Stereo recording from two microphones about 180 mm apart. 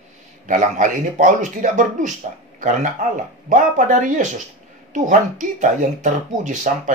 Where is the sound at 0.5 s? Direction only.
45° right (ahead or behind).